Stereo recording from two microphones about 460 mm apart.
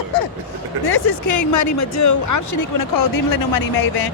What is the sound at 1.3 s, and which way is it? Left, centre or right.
Speech, left.